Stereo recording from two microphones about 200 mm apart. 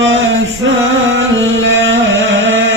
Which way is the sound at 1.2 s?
65° right (ahead or behind).